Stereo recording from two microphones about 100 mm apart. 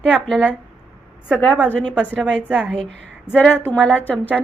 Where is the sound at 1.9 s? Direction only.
10° right (ahead or behind).